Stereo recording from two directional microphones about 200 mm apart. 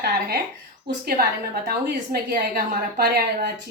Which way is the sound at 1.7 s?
50° right (ahead or behind).